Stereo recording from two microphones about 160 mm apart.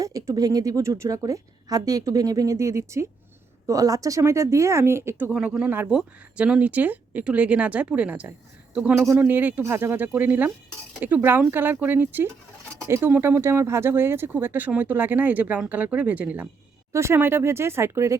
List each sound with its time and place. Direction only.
0.0 s a woman's voice: 20° right (ahead or behind)
5.3 s speech: 5° right (ahead or behind)